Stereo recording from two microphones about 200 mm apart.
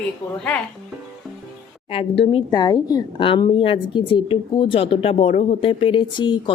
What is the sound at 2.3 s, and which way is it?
A woman's voice, 20° left (ahead or behind).